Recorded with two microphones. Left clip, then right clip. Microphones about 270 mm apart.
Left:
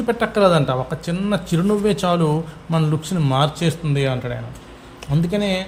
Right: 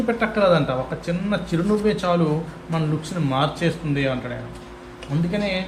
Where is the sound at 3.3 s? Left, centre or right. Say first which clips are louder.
Left 2 dB; left.